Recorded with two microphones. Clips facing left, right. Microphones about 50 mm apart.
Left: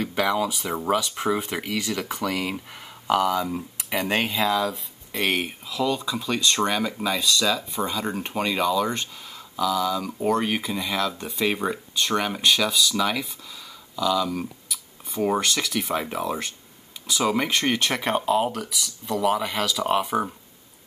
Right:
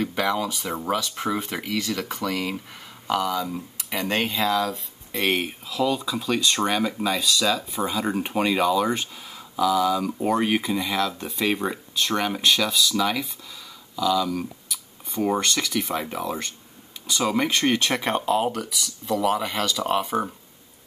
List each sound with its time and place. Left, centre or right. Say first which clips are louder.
0.0 s speech: left 1 dB; centre